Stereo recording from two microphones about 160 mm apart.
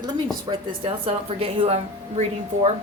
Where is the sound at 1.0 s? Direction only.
35° right (ahead or behind).